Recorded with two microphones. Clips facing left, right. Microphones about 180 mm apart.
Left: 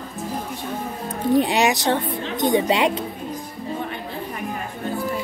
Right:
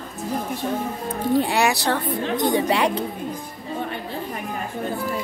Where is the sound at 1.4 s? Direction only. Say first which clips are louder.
Left 2 dB; 20° left (ahead or behind).